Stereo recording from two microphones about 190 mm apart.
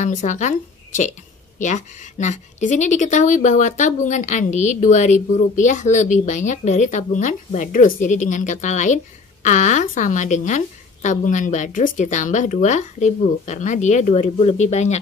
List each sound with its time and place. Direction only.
0.0 s a woman's voice: 40° left (ahead or behind)